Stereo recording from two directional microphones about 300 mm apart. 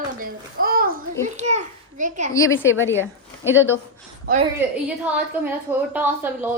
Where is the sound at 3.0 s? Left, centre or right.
Centre.